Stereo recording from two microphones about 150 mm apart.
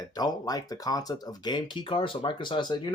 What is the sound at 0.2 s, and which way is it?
Speech, 25° left (ahead or behind).